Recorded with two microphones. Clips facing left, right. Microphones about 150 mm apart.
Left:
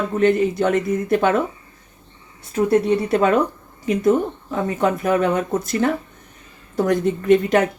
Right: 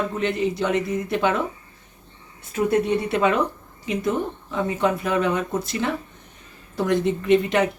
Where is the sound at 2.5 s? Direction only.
40° left (ahead or behind).